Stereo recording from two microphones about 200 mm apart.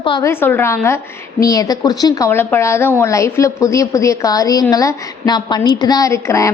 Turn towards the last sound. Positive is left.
turn(degrees=15)  # may be behind; listen again after turning